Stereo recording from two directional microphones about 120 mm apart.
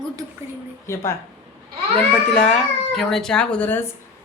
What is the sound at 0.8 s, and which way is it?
Speech, 20° left (ahead or behind).